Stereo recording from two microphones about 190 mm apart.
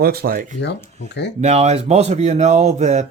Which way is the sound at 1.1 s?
65° left (ahead or behind).